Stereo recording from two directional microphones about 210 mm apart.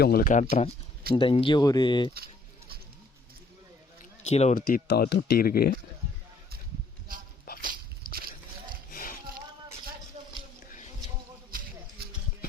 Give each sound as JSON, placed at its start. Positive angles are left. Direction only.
{"t": 0.0, "sound": "speech", "side_deg": 45}
{"t": 1.1, "sound": "speech", "side_deg": 25}
{"t": 4.3, "sound": "speech", "side_deg": 30}
{"t": 7.6, "sound": "a sound", "side_deg": -45}
{"t": 8.9, "sound": "music", "side_deg": 40}
{"t": 10.2, "sound": "a sound", "side_deg": -30}